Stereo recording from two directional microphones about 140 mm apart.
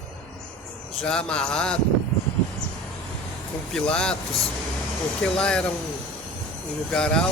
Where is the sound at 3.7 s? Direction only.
5° left (ahead or behind).